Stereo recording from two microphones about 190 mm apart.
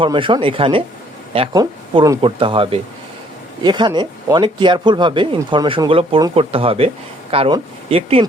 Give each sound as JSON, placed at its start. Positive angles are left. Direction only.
{"t": 0.0, "sound": "speech", "side_deg": -25}